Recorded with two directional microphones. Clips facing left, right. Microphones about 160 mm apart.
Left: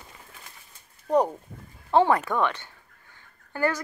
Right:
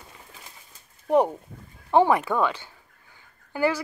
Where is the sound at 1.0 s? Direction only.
20° right (ahead or behind).